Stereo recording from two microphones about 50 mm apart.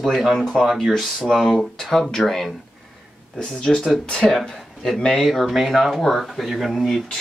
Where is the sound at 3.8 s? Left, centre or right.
Centre.